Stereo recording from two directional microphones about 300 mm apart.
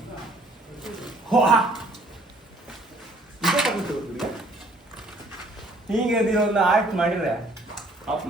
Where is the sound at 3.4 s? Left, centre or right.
Centre.